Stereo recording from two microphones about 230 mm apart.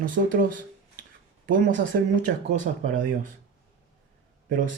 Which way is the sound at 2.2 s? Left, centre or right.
Right.